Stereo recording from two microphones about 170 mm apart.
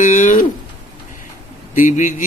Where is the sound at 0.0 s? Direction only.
50° left (ahead or behind).